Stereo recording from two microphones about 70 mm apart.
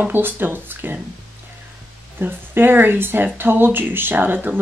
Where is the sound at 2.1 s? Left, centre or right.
Right.